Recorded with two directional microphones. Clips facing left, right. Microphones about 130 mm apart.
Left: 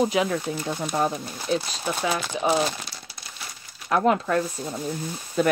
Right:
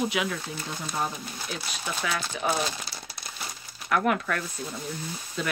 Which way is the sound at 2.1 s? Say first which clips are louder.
Left 4 dB; 20° left (ahead or behind).